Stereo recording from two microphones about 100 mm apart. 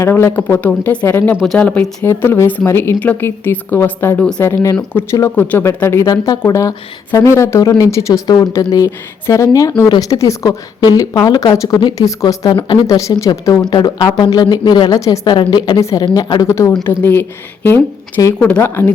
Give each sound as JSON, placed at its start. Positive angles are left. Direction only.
{"t": 0.0, "sound": "a woman's voice", "side_deg": 25}
{"t": 6.1, "sound": "a woman's voice", "side_deg": 40}
{"t": 12.5, "sound": "speech", "side_deg": 55}
{"t": 12.9, "sound": "a woman's voice", "side_deg": 30}
{"t": 13.7, "sound": "a woman's voice", "side_deg": 50}
{"t": 15.4, "sound": "speech", "side_deg": 45}
{"t": 15.8, "sound": "a woman's voice", "side_deg": 35}
{"t": 16.8, "sound": "a woman's voice", "side_deg": 20}